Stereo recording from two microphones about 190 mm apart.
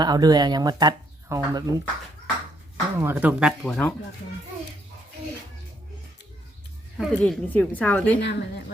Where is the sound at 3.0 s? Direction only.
10° right (ahead or behind); by 4.0 s 5° left (ahead or behind).